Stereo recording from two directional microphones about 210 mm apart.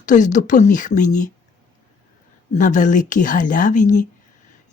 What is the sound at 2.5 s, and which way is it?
Speech, 35° left (ahead or behind).